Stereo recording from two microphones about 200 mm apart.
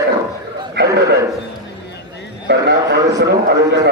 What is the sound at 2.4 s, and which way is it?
A man's voice, 60° right (ahead or behind).